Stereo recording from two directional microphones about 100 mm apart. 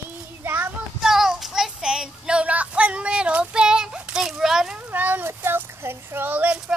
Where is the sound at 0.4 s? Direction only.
20° right (ahead or behind).